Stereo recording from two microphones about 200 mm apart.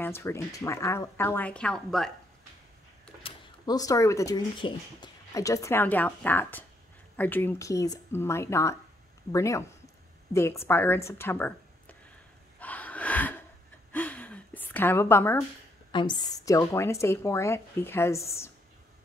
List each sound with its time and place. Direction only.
0.0 s a woman's voice: 10° left (ahead or behind)
3.2 s a woman's voice: 25° left (ahead or behind)
12.5 s gasp: 5° left (ahead or behind)
15.9 s a woman's voice: 25° left (ahead or behind)